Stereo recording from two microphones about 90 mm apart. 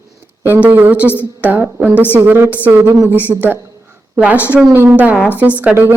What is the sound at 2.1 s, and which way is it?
A woman's voice, 25° right (ahead or behind).